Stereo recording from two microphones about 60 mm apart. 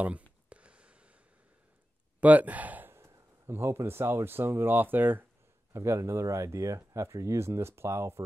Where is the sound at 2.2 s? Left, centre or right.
Right.